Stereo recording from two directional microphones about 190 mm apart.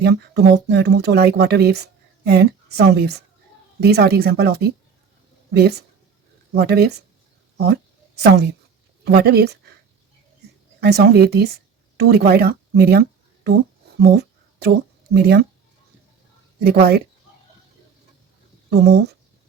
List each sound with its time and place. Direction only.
0.0 s speech: 60° right (ahead or behind)
10.8 s speech: 60° right (ahead or behind)
14.0 s a sound: 60° right (ahead or behind)
15.1 s speech: 55° right (ahead or behind)
16.6 s speech: 55° right (ahead or behind)
18.7 s speech: 60° right (ahead or behind)